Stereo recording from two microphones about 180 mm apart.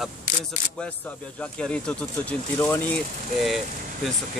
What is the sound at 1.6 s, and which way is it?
Speech, 5° left (ahead or behind).